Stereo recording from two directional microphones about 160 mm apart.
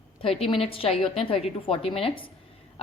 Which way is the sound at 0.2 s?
35° left (ahead or behind).